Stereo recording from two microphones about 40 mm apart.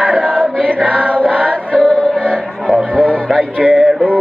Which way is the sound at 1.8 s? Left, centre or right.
Left.